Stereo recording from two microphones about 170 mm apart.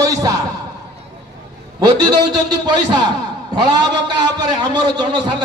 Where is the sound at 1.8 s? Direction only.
25° right (ahead or behind).